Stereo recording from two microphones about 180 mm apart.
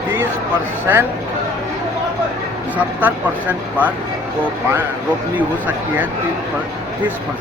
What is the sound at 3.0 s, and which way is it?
Speech, 10° right (ahead or behind).